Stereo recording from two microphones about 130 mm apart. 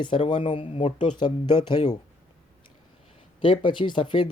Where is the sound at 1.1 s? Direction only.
35° left (ahead or behind).